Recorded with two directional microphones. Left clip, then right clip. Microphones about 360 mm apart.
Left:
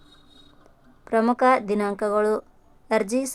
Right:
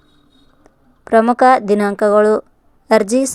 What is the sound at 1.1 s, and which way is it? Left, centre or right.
Speech, centre.